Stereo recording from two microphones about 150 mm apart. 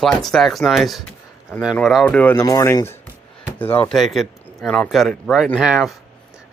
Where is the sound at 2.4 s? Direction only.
25° left (ahead or behind).